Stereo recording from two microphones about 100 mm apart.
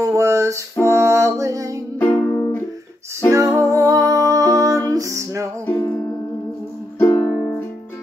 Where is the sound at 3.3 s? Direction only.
30° right (ahead or behind).